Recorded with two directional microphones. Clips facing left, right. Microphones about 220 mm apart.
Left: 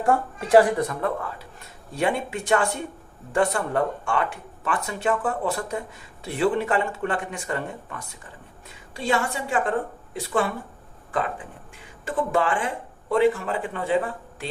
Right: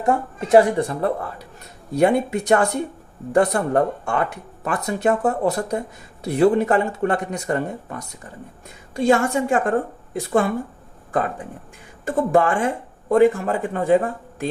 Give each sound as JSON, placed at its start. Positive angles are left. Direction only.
{"t": 0.0, "sound": "speech", "side_deg": -20}
{"t": 12.0, "sound": "speech", "side_deg": -45}